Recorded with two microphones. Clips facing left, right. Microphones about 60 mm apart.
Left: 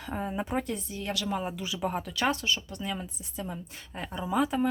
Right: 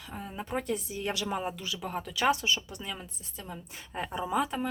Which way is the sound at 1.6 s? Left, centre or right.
Centre.